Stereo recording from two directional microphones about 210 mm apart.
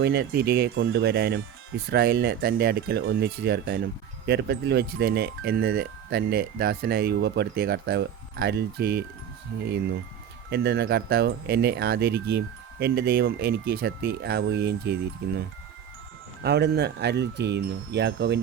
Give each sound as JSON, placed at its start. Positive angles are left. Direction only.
{"t": 0.0, "sound": "speech", "side_deg": -50}
{"t": 10.5, "sound": "speech", "side_deg": -50}